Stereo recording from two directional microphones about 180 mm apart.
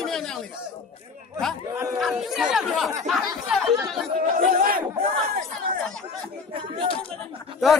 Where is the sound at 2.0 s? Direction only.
Centre (ahead or behind).